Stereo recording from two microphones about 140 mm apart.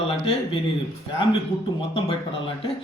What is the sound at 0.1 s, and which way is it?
Speech, 40° left (ahead or behind).